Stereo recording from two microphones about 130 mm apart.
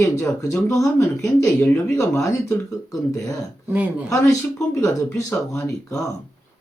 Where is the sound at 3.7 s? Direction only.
15° right (ahead or behind).